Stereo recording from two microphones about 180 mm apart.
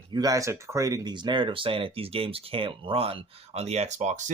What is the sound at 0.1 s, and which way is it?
Speech, 20° right (ahead or behind).